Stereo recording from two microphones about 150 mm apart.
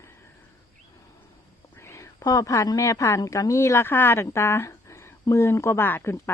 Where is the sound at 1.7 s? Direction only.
20° left (ahead or behind).